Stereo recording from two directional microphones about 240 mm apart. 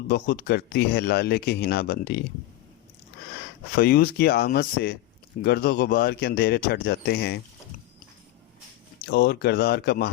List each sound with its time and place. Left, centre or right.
0.1 s speech: left
3.8 s speech: left
9.0 s speech: left